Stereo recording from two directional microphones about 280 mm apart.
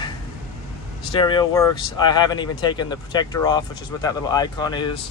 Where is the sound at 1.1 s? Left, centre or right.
Centre.